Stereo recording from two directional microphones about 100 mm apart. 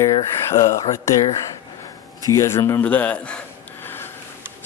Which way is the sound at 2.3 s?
30° left (ahead or behind).